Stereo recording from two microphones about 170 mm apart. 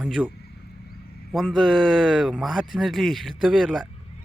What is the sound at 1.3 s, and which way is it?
Speech, 5° right (ahead or behind).